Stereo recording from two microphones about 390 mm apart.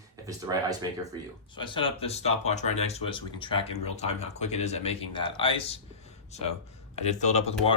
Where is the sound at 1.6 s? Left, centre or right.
Centre.